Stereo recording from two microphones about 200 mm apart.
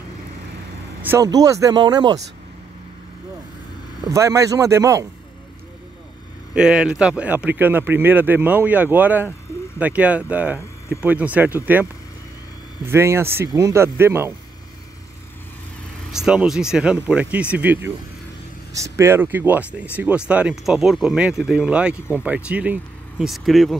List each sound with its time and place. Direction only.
1.0 s speech: 15° right (ahead or behind)
4.0 s speech: 15° right (ahead or behind)
6.5 s speech: 5° right (ahead or behind)
16.1 s speech: 5° right (ahead or behind)